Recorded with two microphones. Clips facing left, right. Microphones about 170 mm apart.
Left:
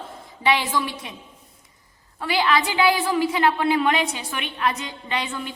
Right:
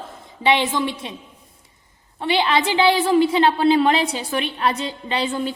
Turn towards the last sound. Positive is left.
turn(degrees=-35)  # may be behind; listen again after turning